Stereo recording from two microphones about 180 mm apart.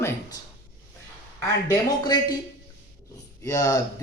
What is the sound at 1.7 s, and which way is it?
Speech, 20° left (ahead or behind).